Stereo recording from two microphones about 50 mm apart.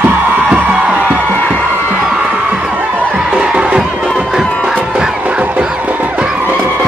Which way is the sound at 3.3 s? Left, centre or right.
Right.